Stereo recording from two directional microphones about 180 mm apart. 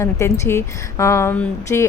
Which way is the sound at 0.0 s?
15° left (ahead or behind).